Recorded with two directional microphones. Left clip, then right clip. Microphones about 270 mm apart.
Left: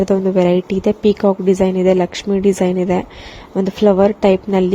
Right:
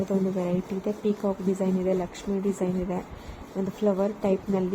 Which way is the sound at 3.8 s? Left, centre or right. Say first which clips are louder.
Left 13 dB; left.